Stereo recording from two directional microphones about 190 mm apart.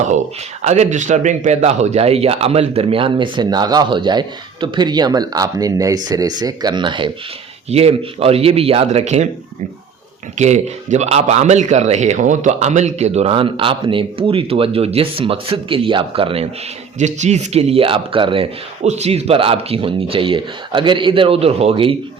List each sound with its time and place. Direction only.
0.6 s speech: 35° right (ahead or behind)
10.3 s speech: 40° right (ahead or behind)